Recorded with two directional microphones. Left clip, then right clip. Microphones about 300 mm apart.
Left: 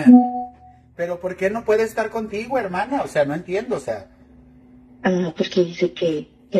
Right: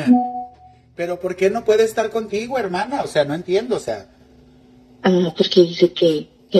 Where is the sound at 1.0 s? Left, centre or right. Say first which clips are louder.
Right 3 dB; right.